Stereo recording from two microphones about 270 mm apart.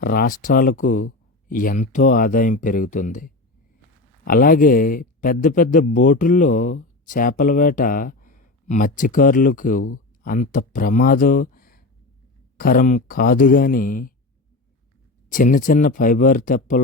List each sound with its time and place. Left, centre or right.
0.0 s speech: left
15.3 s speech: left